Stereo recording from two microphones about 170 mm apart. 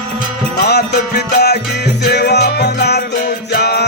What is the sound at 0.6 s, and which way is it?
Music, 70° left (ahead or behind).